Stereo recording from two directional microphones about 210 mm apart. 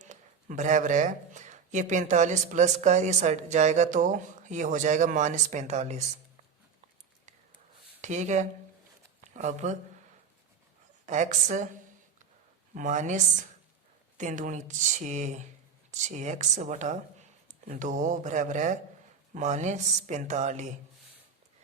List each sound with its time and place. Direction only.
0.0 s speech: 35° right (ahead or behind)
8.0 s speech: 35° right (ahead or behind)
11.0 s speech: 35° right (ahead or behind)
12.7 s speech: 35° right (ahead or behind)